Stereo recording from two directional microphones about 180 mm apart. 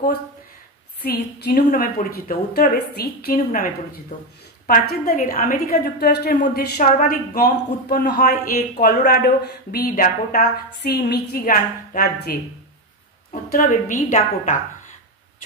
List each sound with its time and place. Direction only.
1.0 s a woman's voice: 55° left (ahead or behind)